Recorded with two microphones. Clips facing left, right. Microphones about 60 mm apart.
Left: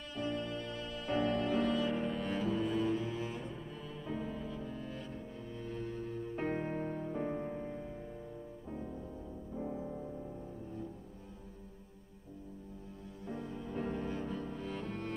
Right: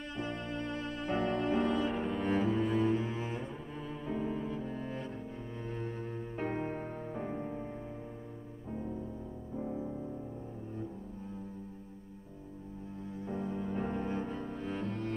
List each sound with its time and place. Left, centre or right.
0.1 s music: right
2.0 s cello: right
4.0 s cello: right
6.3 s music: centre
13.3 s music: right
13.8 s cello: right